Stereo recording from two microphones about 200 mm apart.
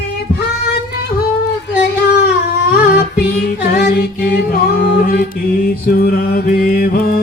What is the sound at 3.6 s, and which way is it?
Female singing, 55° left (ahead or behind).